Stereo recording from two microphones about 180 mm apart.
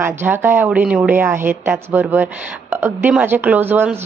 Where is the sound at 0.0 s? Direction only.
10° right (ahead or behind).